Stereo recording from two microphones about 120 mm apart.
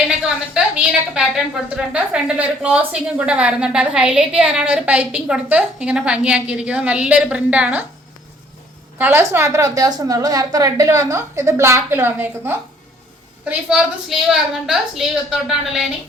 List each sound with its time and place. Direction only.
0.3 s a woman's voice: 5° right (ahead or behind)
9.0 s a woman's voice: 20° right (ahead or behind)
13.4 s a woman's voice: 10° right (ahead or behind)